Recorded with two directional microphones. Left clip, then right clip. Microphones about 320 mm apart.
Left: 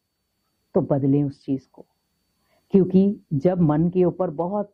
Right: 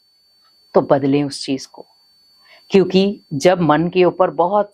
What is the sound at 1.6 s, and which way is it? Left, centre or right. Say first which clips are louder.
Speech: right 11 dB; centre.